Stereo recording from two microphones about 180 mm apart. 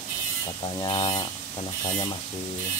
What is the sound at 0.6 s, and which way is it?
Speech, 25° left (ahead or behind).